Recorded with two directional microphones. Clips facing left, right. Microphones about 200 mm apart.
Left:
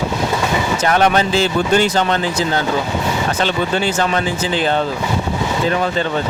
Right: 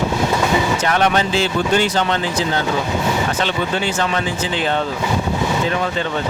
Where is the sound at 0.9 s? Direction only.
40° left (ahead or behind).